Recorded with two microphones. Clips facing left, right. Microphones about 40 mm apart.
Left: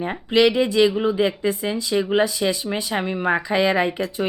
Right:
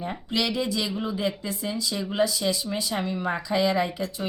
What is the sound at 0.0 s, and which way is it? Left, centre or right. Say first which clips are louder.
Speech: left 10 dB; left.